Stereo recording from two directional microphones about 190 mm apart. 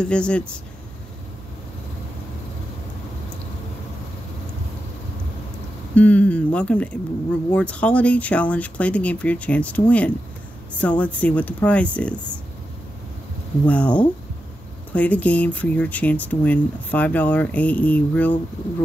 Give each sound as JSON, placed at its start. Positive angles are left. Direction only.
{"t": 0.0, "sound": "speech", "side_deg": 5}
{"t": 5.9, "sound": "speech", "side_deg": 5}
{"t": 13.7, "sound": "speech", "side_deg": 5}